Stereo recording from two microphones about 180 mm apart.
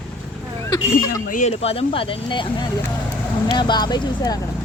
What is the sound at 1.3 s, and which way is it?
Speech, 35° left (ahead or behind).